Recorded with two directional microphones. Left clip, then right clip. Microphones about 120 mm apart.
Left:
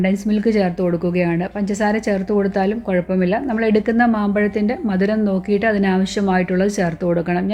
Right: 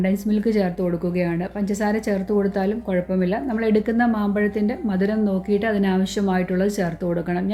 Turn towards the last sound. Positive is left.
turn(degrees=15)  # may be behind; listen again after turning